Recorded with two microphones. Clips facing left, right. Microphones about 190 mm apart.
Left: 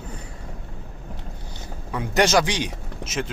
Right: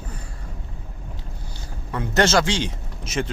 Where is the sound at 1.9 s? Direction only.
15° left (ahead or behind).